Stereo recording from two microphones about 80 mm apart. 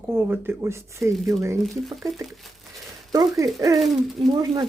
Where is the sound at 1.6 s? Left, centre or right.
Centre.